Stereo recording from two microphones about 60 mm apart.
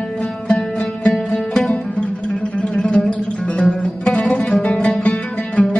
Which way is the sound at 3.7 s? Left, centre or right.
Centre.